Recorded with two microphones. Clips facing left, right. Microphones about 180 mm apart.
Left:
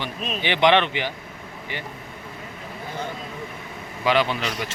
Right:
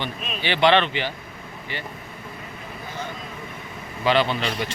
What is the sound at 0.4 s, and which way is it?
Speech, 15° left (ahead or behind).